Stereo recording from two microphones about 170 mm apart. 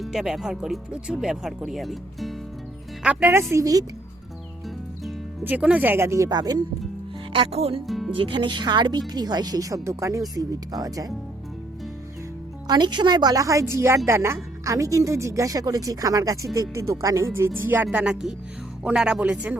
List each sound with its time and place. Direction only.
0.0 s speech: centre (ahead or behind)
3.5 s speech: 20° right (ahead or behind)
5.4 s speech: 10° right (ahead or behind)
7.3 s speech: 35° right (ahead or behind)
7.9 s music: centre (ahead or behind)
8.1 s speech: 30° right (ahead or behind)
12.6 s speech: 25° right (ahead or behind); by 19.5 s 10° right (ahead or behind)